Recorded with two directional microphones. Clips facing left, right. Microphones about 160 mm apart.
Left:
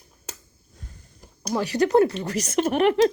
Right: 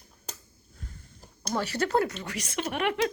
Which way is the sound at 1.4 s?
15° left (ahead or behind).